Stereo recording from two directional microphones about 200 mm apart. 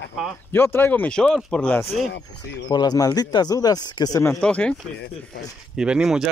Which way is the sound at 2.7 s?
20° left (ahead or behind).